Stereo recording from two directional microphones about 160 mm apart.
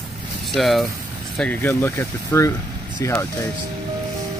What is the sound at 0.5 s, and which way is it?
Speech, centre (ahead or behind).